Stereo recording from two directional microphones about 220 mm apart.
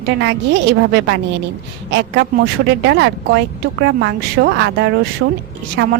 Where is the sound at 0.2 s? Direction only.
55° right (ahead or behind).